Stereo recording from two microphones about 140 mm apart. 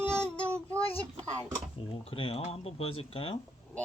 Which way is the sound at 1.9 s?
40° left (ahead or behind).